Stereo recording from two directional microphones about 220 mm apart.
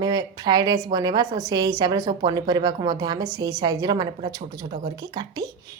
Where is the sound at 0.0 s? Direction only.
20° right (ahead or behind).